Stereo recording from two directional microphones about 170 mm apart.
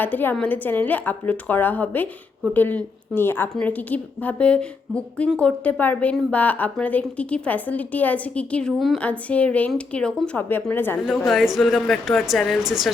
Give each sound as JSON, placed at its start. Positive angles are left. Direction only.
{"t": 0.0, "sound": "a woman's voice", "side_deg": 10}
{"t": 11.3, "sound": "speech", "side_deg": 0}